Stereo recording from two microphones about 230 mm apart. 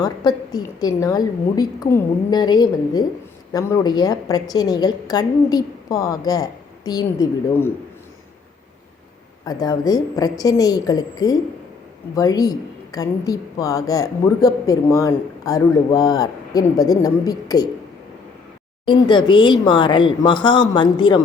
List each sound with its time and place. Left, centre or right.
0.0 s a woman's voice: centre
9.4 s a woman's voice: centre
18.9 s speech: centre